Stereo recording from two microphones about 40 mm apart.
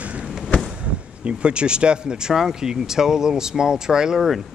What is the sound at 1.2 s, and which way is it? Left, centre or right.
Speech, right.